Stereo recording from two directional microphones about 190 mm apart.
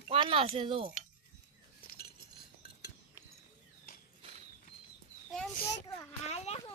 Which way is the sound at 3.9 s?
50° left (ahead or behind).